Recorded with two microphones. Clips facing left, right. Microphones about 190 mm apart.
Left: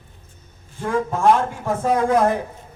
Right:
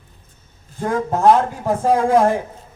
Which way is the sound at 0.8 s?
40° right (ahead or behind).